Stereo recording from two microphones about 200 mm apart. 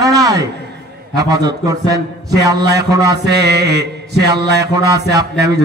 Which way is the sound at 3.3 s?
55° right (ahead or behind).